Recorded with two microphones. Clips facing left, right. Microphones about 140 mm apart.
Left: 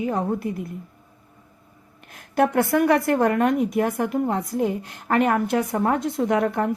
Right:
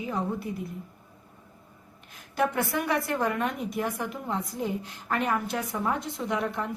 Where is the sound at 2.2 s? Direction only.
60° left (ahead or behind).